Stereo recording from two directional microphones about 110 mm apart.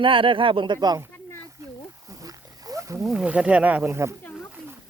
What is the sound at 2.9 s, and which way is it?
Speech, 5° right (ahead or behind).